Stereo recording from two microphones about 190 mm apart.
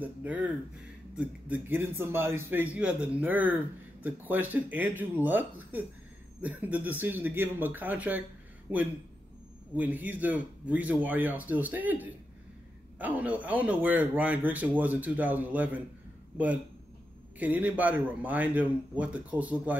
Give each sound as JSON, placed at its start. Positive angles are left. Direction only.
{"t": 0.0, "sound": "a man's voice", "side_deg": -10}
{"t": 17.4, "sound": "a man's voice", "side_deg": -10}